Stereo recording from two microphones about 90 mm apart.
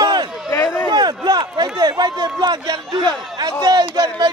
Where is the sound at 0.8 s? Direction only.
55° right (ahead or behind).